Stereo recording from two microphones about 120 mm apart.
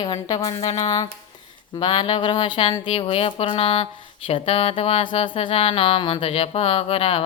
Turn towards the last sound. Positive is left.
turn(degrees=55)  # may be behind; listen again after turning